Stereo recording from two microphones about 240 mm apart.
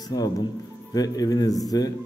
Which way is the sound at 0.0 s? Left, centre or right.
Centre.